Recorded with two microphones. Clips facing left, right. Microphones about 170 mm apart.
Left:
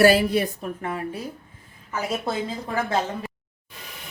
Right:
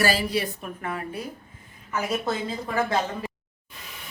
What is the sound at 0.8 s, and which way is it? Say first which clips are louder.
Speech: left 1 dB; 20° left (ahead or behind).